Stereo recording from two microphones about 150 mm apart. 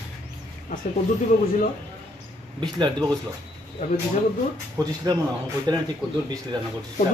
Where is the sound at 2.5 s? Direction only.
30° right (ahead or behind).